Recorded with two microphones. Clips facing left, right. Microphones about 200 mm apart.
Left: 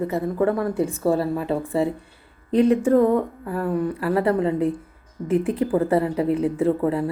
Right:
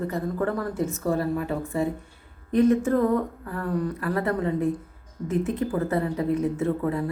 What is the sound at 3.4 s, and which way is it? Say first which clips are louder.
Speech: left 4 dB; 25° left (ahead or behind).